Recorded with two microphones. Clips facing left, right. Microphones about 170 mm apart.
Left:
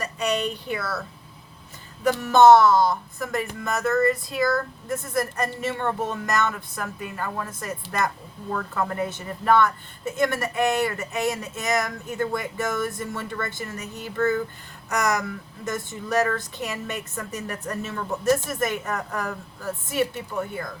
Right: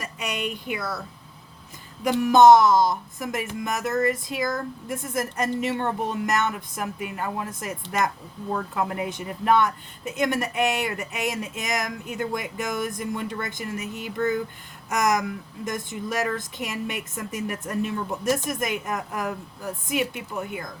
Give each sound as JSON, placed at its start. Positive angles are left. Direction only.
{"t": 0.5, "sound": "a woman's voice", "side_deg": -15}
{"t": 2.0, "sound": "a woman's voice", "side_deg": -15}